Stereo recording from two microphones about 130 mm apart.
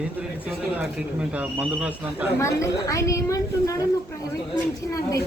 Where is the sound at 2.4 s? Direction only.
25° left (ahead or behind).